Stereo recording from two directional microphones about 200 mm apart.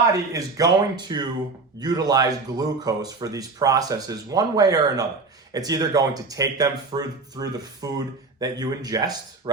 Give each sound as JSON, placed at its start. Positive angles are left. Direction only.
{"t": 0.1, "sound": "speech", "side_deg": -15}